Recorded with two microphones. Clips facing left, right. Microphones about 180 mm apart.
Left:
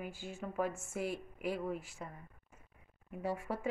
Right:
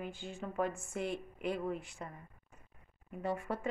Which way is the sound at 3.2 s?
10° left (ahead or behind).